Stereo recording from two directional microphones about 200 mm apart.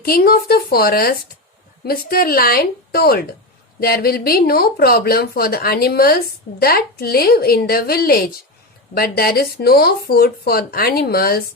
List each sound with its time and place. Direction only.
0.0 s speech: 50° left (ahead or behind)